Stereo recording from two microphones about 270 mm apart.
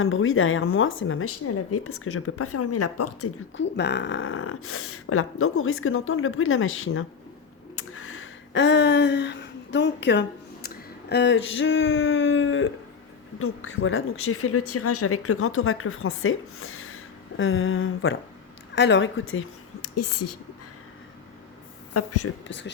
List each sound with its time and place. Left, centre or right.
0.0 s a woman's voice: left
3.6 s a woman's voice: left
7.8 s a sound: left
13.4 s a woman's voice: left
19.3 s speech: left
21.9 s speech: left
22.4 s a woman's voice: left